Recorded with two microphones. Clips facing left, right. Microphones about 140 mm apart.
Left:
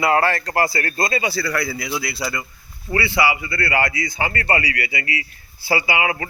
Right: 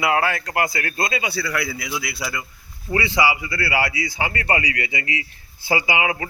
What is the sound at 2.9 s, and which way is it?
A man's voice, 15° right (ahead or behind).